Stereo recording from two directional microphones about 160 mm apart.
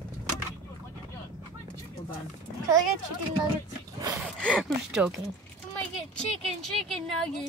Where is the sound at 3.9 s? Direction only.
20° right (ahead or behind).